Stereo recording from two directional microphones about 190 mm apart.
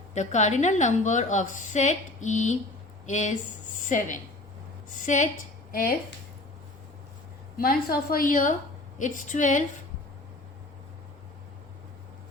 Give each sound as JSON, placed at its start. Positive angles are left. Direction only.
{"t": 0.1, "sound": "a woman's voice", "side_deg": 40}
{"t": 7.5, "sound": "a woman's voice", "side_deg": 55}